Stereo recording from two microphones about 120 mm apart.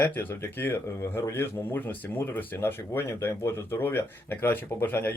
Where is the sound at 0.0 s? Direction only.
20° left (ahead or behind).